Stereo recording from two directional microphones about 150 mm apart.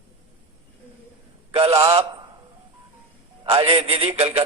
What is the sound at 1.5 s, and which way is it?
Speech, 40° right (ahead or behind).